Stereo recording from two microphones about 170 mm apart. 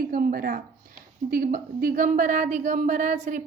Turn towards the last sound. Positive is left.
turn(degrees=-45)  # may be behind; listen again after turning